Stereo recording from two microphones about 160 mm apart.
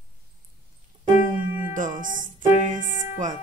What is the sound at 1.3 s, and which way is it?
Music, 60° right (ahead or behind).